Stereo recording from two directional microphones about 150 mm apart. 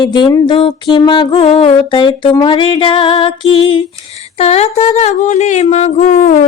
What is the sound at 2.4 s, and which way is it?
Female singing, 35° left (ahead or behind).